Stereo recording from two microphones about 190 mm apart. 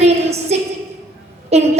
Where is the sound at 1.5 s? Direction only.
35° right (ahead or behind).